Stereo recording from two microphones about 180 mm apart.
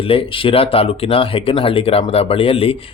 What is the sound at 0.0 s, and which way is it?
Speech, 30° left (ahead or behind).